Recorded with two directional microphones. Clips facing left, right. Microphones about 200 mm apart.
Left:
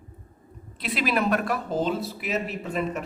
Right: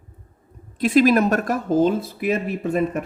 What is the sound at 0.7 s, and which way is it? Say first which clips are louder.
Speech: right 10 dB; 45° right (ahead or behind).